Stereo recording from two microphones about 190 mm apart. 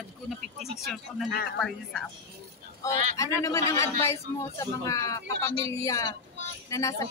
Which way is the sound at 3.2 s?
15° left (ahead or behind).